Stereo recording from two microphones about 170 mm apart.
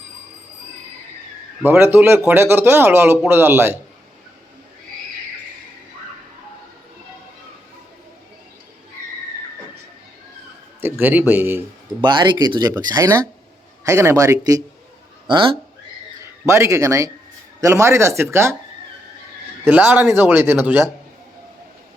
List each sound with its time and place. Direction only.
1.6 s speech: 10° right (ahead or behind)
10.8 s speech: 15° right (ahead or behind)
12.0 s speech: 30° right (ahead or behind)
16.5 s speech: 15° right (ahead or behind)
19.6 s speech: 10° right (ahead or behind)